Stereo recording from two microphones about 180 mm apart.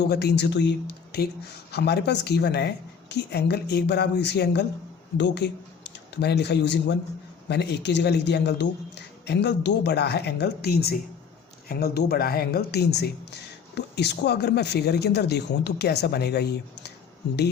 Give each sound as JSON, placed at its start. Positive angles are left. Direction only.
{"t": 0.1, "sound": "speech", "side_deg": 65}